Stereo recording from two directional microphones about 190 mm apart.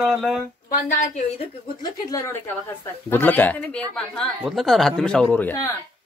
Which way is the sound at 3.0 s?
10° left (ahead or behind).